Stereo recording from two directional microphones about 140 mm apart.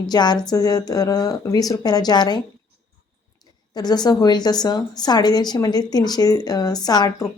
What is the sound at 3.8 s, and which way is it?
A woman's voice, 30° left (ahead or behind).